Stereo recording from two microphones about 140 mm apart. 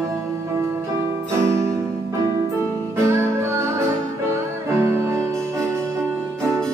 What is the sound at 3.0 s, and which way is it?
Music, 20° right (ahead or behind).